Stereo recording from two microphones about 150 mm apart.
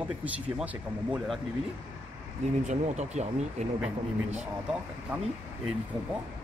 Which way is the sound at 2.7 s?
50° right (ahead or behind).